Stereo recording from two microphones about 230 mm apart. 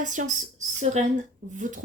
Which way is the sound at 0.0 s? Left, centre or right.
Right.